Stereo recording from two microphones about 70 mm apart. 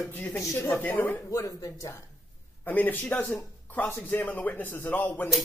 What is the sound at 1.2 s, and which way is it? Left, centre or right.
Speech, left.